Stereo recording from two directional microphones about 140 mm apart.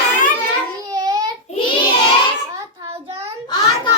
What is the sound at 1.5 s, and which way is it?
Child singing, 50° left (ahead or behind).